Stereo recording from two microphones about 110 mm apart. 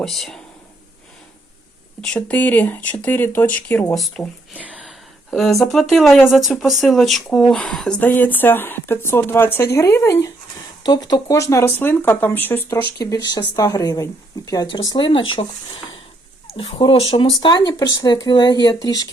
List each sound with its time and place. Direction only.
0.0 s speech: centre (ahead or behind)
2.0 s speech: 10° left (ahead or behind)
4.2 s speech: centre (ahead or behind)
4.7 s a sound: 5° left (ahead or behind)
5.3 s speech: centre (ahead or behind); by 10.3 s 25° left (ahead or behind)
10.8 s speech: 40° left (ahead or behind); by 12.8 s 15° left (ahead or behind)
13.1 s speech: 40° left (ahead or behind)
16.6 s speech: 55° left (ahead or behind)
17.4 s speech: 45° left (ahead or behind)